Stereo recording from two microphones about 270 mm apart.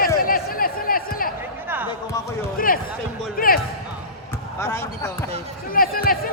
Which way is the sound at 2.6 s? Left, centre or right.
Left.